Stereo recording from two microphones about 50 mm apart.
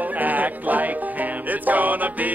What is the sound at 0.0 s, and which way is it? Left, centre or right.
Music, right.